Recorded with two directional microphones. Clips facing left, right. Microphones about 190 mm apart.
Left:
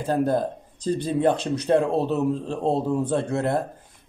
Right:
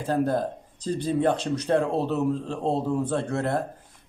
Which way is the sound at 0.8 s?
20° left (ahead or behind).